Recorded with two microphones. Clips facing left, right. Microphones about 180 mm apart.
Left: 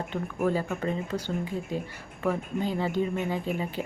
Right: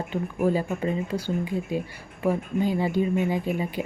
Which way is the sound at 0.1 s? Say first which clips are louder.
Right 4 dB; 15° right (ahead or behind).